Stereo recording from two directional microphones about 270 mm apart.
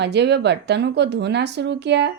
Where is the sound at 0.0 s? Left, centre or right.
Right.